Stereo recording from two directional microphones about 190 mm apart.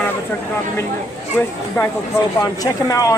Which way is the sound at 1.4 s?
5° left (ahead or behind).